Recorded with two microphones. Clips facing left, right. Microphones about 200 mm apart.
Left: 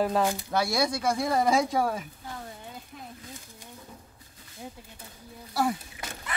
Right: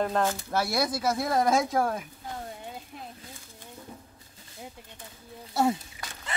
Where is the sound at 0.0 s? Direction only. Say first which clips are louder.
Left 1 dB; 10° left (ahead or behind).